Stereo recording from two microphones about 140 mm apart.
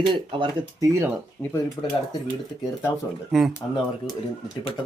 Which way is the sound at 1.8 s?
30° left (ahead or behind).